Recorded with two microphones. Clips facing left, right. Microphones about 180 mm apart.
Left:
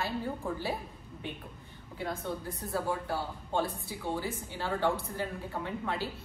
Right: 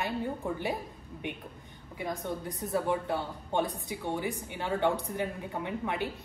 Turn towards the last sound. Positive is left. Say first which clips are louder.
# right 2 dB
turn(degrees=-15)  # may be behind; listen again after turning